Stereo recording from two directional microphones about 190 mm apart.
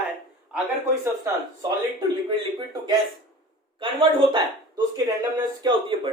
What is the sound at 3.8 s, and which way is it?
Speech, 25° right (ahead or behind).